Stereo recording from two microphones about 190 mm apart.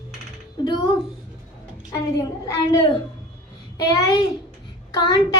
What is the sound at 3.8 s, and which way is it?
Speech, 15° left (ahead or behind).